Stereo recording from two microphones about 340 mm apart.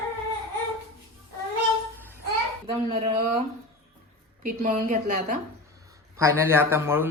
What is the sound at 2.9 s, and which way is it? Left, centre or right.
Speech, centre.